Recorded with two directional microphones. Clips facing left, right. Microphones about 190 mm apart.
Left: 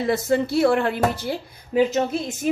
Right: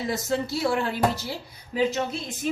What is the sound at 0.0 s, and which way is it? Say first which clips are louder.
A woman's voice: left 6 dB; 55° left (ahead or behind).